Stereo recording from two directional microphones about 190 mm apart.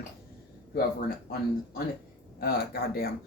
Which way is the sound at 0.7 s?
50° left (ahead or behind).